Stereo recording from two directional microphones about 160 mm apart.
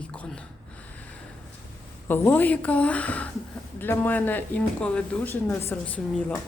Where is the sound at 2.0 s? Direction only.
15° left (ahead or behind).